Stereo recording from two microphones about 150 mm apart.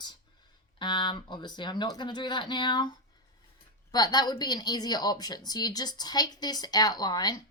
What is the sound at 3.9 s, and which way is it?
Speech, 30° left (ahead or behind).